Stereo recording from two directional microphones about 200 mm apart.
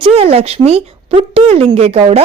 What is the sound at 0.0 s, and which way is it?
Speech, 30° right (ahead or behind).